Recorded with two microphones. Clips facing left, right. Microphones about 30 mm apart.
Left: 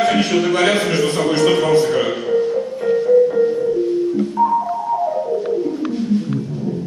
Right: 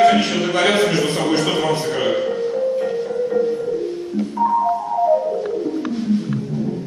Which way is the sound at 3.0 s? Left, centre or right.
Centre.